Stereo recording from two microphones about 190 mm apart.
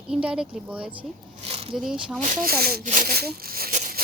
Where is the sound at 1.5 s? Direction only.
30° right (ahead or behind).